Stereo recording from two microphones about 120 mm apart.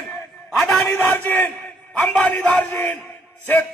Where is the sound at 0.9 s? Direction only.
20° left (ahead or behind).